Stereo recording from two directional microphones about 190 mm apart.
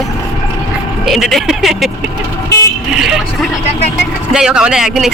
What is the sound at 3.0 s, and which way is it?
Speech, 5° right (ahead or behind).